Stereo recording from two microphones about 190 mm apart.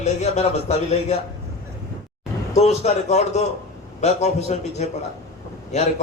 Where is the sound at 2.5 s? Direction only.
35° left (ahead or behind).